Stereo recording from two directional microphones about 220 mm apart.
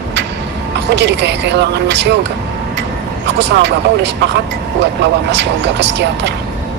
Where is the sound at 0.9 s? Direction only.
50° right (ahead or behind).